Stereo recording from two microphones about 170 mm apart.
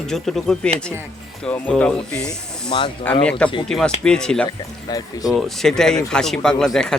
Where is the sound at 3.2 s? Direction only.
5° left (ahead or behind).